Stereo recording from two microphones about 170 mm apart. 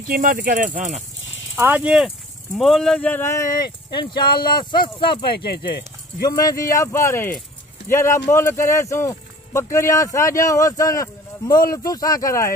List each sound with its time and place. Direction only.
0.1 s speech: 55° right (ahead or behind)
1.5 s speech: 10° right (ahead or behind); by 5.2 s 30° left (ahead or behind)
5.4 s speech: 70° left (ahead or behind)
6.2 s speech: 20° left (ahead or behind)